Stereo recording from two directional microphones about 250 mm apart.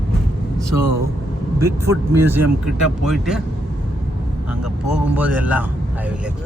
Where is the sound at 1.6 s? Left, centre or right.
Centre.